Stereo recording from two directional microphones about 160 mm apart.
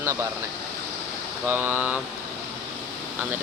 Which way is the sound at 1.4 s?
10° right (ahead or behind).